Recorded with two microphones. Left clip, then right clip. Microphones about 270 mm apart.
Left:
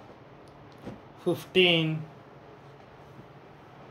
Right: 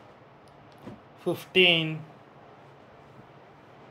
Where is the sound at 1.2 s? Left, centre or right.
Centre.